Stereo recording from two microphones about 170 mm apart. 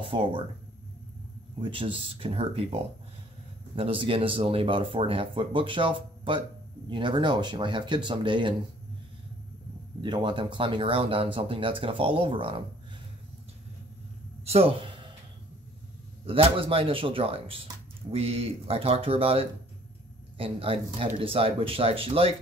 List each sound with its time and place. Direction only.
0.0 s speech: 30° right (ahead or behind)
1.6 s speech: 30° right (ahead or behind)
10.0 s speech: 30° right (ahead or behind)
14.4 s speech: 35° right (ahead or behind)
16.3 s speech: 30° right (ahead or behind)